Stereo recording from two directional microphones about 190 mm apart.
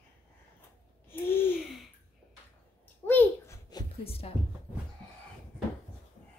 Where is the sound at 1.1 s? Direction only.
10° left (ahead or behind).